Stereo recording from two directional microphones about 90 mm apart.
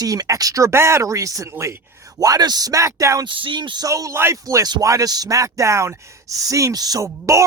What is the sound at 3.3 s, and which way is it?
Speech, 70° right (ahead or behind).